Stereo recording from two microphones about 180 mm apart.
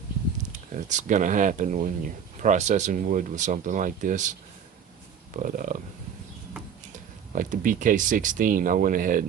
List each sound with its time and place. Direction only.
0.7 s speech: 45° right (ahead or behind)
5.4 s speech: 50° right (ahead or behind)
7.3 s speech: 50° right (ahead or behind)